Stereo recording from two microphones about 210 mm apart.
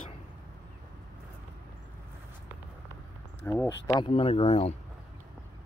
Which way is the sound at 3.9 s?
25° left (ahead or behind).